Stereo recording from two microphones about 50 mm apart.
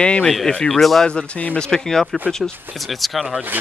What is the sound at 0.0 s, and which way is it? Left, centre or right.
Speech, centre.